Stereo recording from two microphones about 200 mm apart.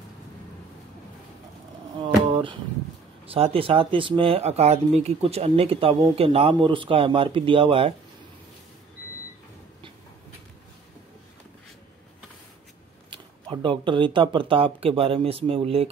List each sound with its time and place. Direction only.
3.3 s speech: 30° right (ahead or behind)
13.1 s speech: 25° right (ahead or behind)